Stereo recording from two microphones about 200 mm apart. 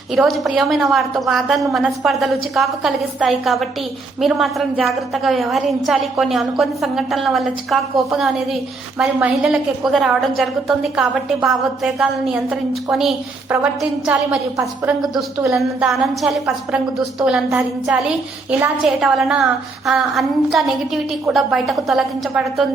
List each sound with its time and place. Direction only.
0.1 s a woman's voice: centre (ahead or behind)
15.9 s a woman's voice: centre (ahead or behind)